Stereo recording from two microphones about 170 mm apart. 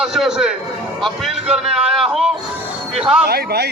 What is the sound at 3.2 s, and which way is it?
Speech, 70° right (ahead or behind).